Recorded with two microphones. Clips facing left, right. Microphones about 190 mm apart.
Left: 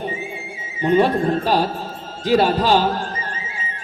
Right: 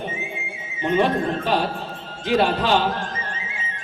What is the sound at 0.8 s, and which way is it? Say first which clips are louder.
A woman's voice: left 4 dB; 35° left (ahead or behind).